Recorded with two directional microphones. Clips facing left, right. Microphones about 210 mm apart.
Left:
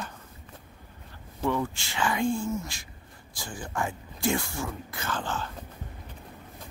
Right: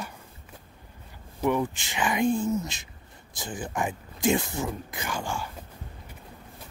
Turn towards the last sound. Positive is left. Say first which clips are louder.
# even
turn(degrees=-10)  # may be behind; listen again after turning